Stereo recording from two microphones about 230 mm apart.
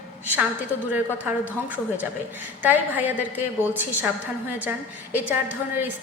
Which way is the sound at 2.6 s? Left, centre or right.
Centre.